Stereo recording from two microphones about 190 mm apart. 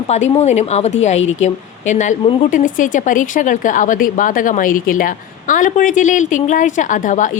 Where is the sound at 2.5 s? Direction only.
45° left (ahead or behind).